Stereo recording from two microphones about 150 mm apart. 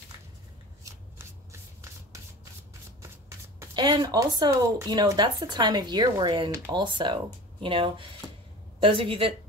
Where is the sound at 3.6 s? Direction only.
30° right (ahead or behind).